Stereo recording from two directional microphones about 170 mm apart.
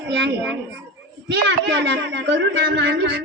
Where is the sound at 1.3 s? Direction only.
90° right.